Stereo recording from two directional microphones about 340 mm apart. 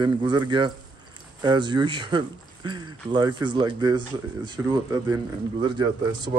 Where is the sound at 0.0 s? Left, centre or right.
Centre.